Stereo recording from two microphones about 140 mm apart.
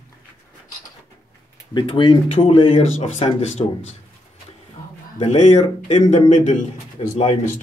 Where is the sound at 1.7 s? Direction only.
35° left (ahead or behind).